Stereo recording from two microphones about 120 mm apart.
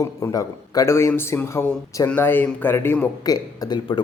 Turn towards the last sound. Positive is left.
turn(degrees=35)  # may be behind; listen again after turning